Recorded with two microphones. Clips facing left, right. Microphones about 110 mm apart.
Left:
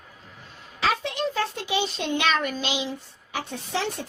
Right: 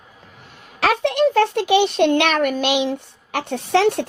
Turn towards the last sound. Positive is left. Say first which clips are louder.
# right 12 dB
turn(degrees=-65)  # may be behind; listen again after turning